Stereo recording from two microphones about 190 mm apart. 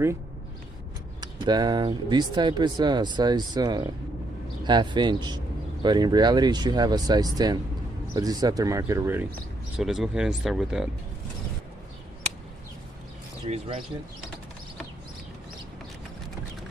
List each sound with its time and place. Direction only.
1.2 s speech: 20° right (ahead or behind); by 10.9 s centre (ahead or behind)
13.5 s speech: 30° right (ahead or behind)